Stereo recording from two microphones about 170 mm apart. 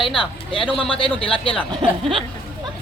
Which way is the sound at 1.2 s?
30° left (ahead or behind).